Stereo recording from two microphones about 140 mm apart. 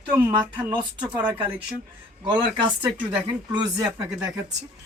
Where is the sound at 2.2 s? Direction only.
35° right (ahead or behind).